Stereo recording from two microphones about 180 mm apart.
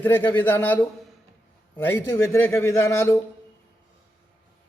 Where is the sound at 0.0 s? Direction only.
10° left (ahead or behind).